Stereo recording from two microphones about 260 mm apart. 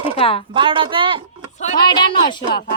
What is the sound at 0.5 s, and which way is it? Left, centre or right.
Speech, centre.